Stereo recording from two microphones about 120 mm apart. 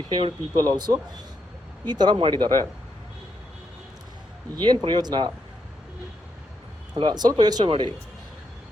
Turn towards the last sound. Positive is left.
turn(degrees=-40)  # may be behind; listen again after turning